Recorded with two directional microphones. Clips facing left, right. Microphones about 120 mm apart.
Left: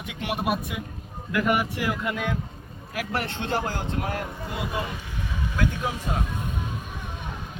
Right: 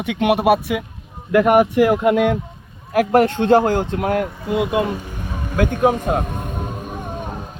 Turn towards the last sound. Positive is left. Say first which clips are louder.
# right 8 dB
turn(degrees=-45)  # may be behind; listen again after turning